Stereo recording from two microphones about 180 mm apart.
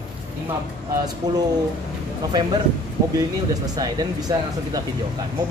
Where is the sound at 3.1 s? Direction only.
20° right (ahead or behind).